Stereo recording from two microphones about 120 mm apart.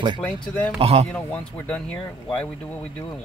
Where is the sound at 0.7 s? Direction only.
55° right (ahead or behind).